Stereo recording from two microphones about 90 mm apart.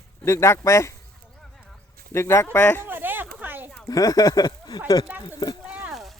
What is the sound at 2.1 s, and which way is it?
Speech, 30° left (ahead or behind).